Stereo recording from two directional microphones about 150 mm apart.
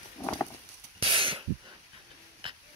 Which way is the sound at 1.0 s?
35° right (ahead or behind).